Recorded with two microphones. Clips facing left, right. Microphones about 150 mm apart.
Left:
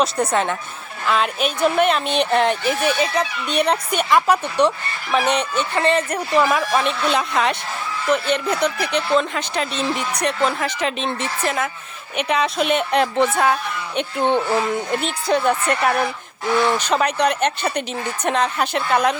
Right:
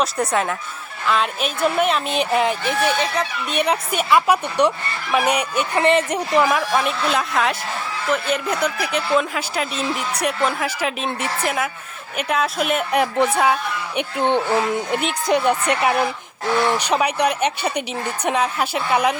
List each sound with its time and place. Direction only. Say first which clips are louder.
0.0 s speech: left 1 dB; centre (ahead or behind); by 6.5 s 15° right (ahead or behind)
6.7 s speech: left 1 dB; centre (ahead or behind)